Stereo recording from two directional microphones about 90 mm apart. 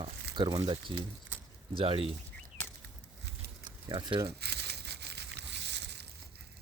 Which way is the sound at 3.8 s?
50° right (ahead or behind).